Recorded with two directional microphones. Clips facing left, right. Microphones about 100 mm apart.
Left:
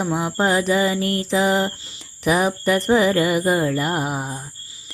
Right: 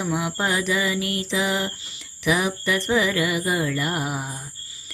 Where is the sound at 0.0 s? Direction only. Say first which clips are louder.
Left 4 dB; 35° left (ahead or behind).